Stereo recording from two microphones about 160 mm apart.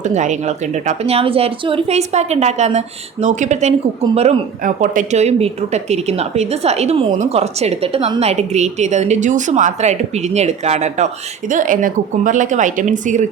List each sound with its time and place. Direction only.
0.0 s speech: 50° right (ahead or behind)
4.6 s speech: 55° right (ahead or behind)